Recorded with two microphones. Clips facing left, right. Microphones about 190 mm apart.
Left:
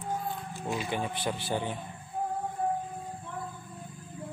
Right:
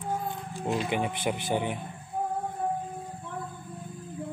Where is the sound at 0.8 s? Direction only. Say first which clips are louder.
Right 3 dB; 20° right (ahead or behind).